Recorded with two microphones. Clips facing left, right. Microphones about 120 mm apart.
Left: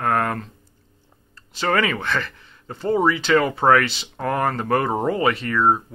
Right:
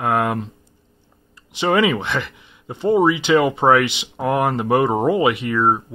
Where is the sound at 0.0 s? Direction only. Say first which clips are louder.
Right 2 dB; 15° right (ahead or behind).